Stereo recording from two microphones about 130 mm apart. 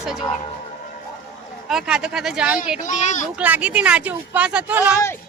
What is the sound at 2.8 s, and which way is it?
Speech, 65° left (ahead or behind).